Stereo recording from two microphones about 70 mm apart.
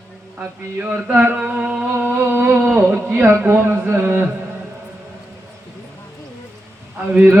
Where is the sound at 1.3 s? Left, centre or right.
Centre.